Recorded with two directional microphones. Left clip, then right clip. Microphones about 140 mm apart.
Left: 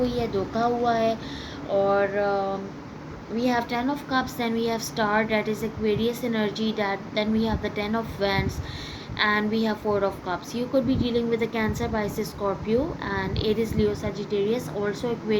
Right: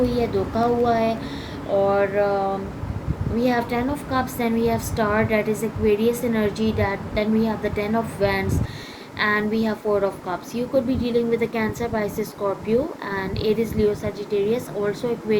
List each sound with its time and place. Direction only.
0.0 s a woman's voice: 55° left (ahead or behind)